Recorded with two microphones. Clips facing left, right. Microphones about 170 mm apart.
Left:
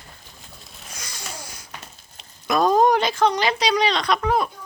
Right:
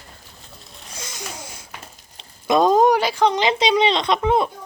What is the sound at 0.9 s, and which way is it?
Babbling, 20° right (ahead or behind).